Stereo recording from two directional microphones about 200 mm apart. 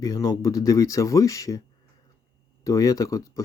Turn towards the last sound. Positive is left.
turn(degrees=15)  # may be behind; listen again after turning